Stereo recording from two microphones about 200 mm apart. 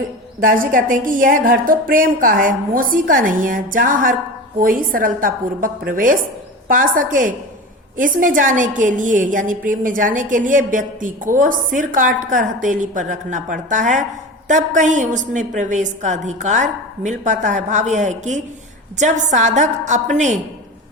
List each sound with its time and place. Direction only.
0.4 s a woman's voice: 45° right (ahead or behind)